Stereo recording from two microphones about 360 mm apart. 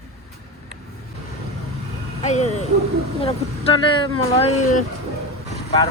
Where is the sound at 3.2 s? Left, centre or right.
Centre.